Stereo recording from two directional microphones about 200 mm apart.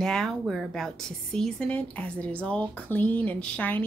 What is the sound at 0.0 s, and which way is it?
A woman's voice, centre (ahead or behind).